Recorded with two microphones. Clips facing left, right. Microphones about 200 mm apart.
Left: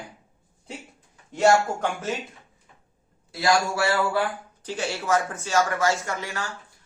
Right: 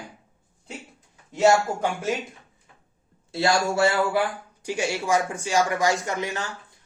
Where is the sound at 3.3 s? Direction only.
25° right (ahead or behind).